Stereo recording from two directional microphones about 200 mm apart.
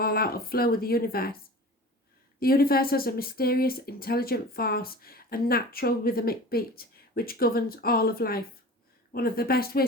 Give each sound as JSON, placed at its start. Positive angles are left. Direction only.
{"t": 0.0, "sound": "speech", "side_deg": 50}
{"t": 2.4, "sound": "speech", "side_deg": 50}